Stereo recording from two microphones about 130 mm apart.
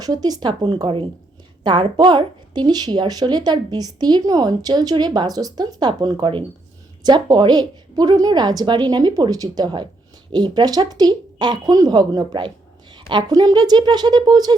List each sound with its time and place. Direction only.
0.0 s a woman's voice: 30° right (ahead or behind)